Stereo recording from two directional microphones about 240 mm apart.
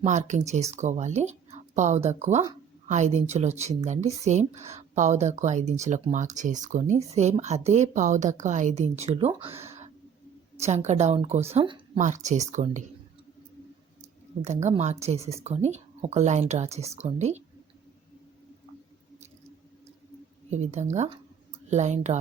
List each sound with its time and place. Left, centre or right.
0.0 s speech: right
10.6 s speech: right
14.4 s speech: right
20.5 s speech: right